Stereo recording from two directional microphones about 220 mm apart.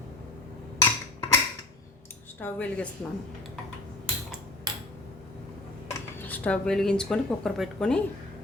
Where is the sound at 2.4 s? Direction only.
5° left (ahead or behind).